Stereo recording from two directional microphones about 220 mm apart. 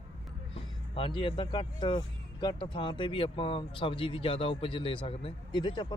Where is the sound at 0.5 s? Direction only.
25° left (ahead or behind).